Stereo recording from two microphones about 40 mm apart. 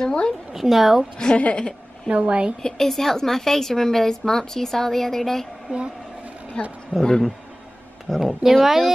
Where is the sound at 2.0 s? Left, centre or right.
Right.